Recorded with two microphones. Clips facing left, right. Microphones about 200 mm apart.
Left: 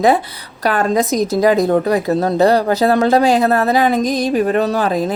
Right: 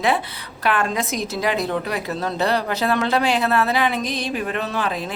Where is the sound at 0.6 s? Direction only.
40° left (ahead or behind).